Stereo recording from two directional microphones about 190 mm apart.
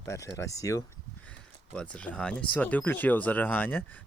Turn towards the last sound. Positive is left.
turn(degrees=10)  # may be behind; listen again after turning